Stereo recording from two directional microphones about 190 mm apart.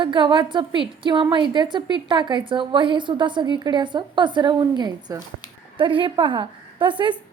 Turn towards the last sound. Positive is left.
turn(degrees=-25)  # may be behind; listen again after turning